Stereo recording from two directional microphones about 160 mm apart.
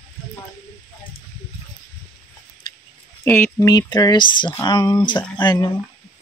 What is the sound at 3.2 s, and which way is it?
Speech, 15° left (ahead or behind).